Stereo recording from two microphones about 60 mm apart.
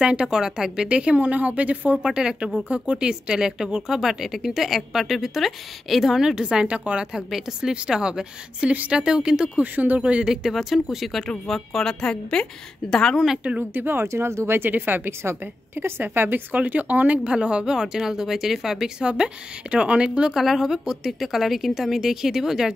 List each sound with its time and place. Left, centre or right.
0.0 s speech: centre
2.0 s a woman's voice: centre
7.2 s a woman's voice: centre
9.6 s a woman's voice: right; by 13.2 s centre
13.4 s speech: right
13.7 s speech: right
14.0 s speech: right
14.6 s a woman's voice: right; by 20.3 s centre
20.3 s speech: centre